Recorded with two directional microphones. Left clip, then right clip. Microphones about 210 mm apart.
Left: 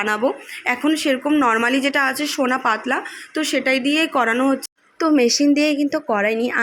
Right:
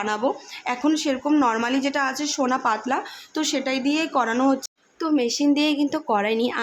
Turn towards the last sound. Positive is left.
turn(degrees=10)  # may be behind; listen again after turning